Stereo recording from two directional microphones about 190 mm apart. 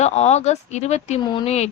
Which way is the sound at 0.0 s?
35° left (ahead or behind).